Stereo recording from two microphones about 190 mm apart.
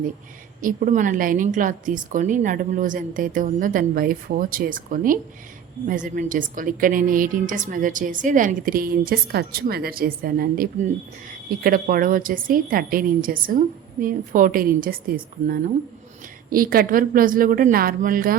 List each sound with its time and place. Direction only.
0.6 s a woman's voice: 45° right (ahead or behind)